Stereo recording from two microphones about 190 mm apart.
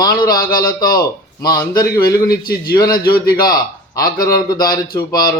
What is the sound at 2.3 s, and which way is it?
Speech, 55° left (ahead or behind).